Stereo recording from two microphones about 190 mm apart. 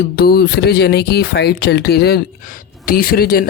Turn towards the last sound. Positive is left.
turn(degrees=50)  # may be behind; listen again after turning